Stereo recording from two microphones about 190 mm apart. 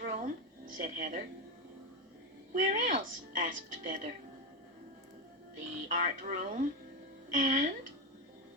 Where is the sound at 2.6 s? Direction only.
40° right (ahead or behind).